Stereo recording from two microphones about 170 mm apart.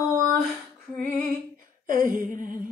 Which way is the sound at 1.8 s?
55° right (ahead or behind).